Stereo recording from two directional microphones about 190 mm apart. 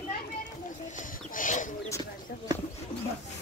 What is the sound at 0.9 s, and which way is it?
Wild animals, 45° left (ahead or behind).